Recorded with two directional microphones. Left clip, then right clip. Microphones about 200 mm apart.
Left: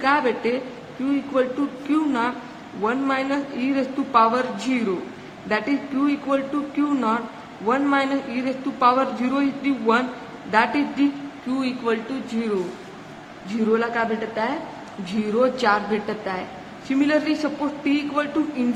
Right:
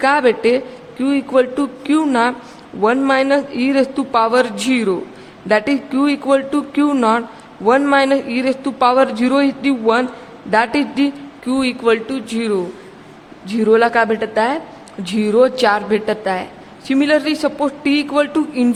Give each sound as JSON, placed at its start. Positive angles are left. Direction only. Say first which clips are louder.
{"t": 0.0, "sound": "a man's voice", "louder": "right 7 dB", "side_deg": -60}